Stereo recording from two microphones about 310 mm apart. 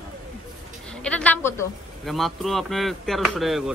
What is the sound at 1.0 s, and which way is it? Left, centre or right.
Speech, centre.